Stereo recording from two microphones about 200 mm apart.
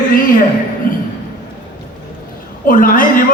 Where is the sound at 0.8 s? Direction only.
45° left (ahead or behind).